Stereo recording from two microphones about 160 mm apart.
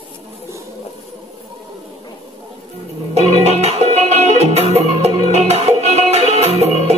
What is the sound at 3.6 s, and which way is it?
Music, 40° right (ahead or behind).